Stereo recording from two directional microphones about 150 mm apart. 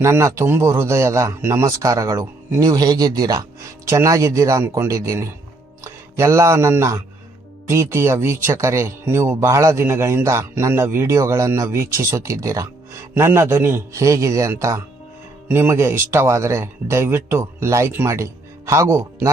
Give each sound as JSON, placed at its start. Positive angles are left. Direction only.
{"t": 0.0, "sound": "speech", "side_deg": -20}